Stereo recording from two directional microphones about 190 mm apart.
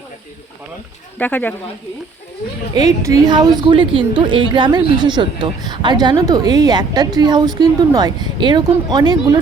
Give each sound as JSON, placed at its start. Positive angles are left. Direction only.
{"t": 1.2, "sound": "speech", "side_deg": 10}
{"t": 2.7, "sound": "a woman's voice", "side_deg": -20}